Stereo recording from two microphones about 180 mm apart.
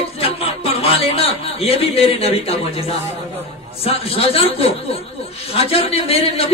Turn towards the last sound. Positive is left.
turn(degrees=35)  # may be behind; listen again after turning